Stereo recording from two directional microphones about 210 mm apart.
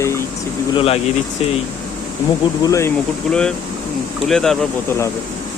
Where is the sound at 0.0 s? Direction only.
15° left (ahead or behind).